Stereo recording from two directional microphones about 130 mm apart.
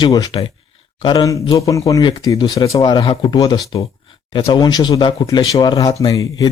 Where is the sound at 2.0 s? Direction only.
35° left (ahead or behind).